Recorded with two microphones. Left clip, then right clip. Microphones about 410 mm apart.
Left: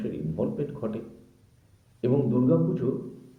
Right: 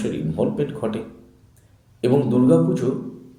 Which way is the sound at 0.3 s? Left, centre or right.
Left.